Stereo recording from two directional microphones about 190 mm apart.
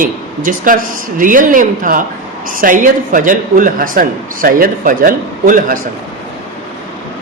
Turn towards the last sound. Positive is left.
turn(degrees=-45)  # may be behind; listen again after turning